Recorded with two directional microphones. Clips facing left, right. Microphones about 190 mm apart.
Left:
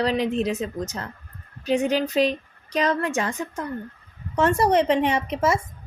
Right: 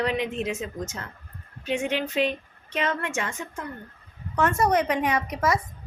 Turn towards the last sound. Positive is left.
turn(degrees=25)  # may be behind; listen again after turning